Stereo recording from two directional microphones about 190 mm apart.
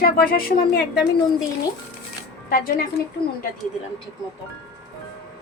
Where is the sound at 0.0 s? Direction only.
50° left (ahead or behind).